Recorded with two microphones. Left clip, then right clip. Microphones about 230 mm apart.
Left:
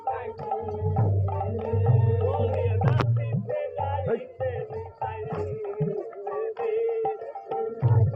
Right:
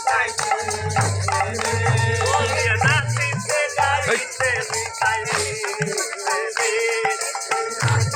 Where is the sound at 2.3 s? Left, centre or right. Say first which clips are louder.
Right 8 dB; right.